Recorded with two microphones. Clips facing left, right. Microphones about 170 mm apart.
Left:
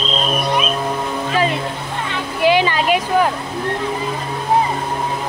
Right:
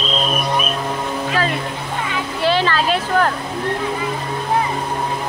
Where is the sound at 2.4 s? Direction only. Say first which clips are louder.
Left 3 dB; 15° left (ahead or behind).